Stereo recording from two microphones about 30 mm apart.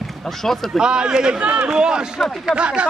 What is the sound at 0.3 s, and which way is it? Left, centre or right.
Speech, centre.